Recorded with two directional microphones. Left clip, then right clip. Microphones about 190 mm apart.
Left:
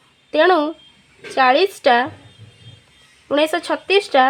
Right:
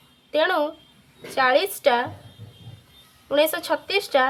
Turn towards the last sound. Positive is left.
turn(degrees=45)  # may be behind; listen again after turning